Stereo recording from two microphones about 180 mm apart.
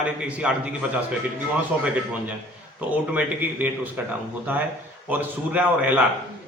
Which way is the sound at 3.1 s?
10° right (ahead or behind).